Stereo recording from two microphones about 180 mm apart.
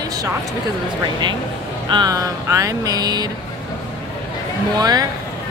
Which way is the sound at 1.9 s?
20° right (ahead or behind).